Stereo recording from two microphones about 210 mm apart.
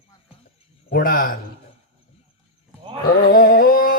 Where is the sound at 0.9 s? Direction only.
45° left (ahead or behind).